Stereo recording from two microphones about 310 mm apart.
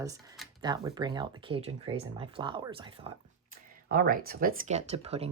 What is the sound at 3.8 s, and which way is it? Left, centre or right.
Speech, right.